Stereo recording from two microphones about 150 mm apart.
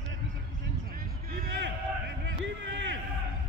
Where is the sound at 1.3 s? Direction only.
90° right.